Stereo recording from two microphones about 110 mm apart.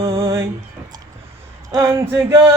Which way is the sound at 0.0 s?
55° right (ahead or behind).